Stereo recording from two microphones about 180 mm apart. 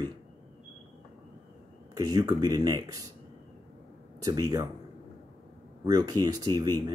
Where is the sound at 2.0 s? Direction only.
20° right (ahead or behind).